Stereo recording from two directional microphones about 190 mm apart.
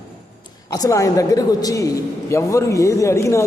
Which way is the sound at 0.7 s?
20° left (ahead or behind).